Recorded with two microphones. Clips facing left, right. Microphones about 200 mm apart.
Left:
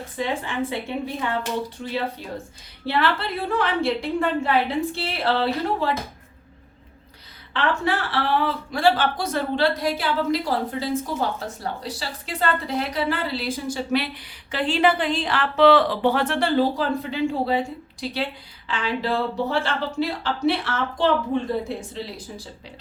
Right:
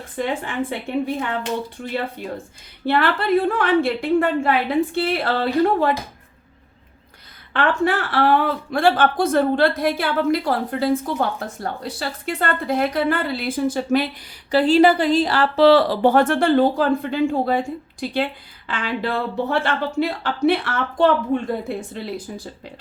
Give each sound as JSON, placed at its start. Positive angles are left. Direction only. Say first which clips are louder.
{"t": 0.2, "sound": "speech", "louder": "right 2 dB", "side_deg": -55}
{"t": 2.8, "sound": "speech", "louder": "right 4 dB", "side_deg": -55}
{"t": 7.5, "sound": "speech", "louder": "right 4 dB", "side_deg": -50}